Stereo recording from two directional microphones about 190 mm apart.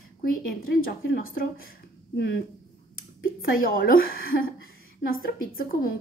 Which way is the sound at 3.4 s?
50° left (ahead or behind).